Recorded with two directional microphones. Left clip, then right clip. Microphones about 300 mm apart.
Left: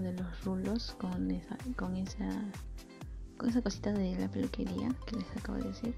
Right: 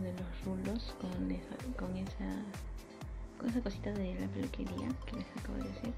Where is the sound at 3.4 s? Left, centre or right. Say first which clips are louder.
Left 4 dB; left.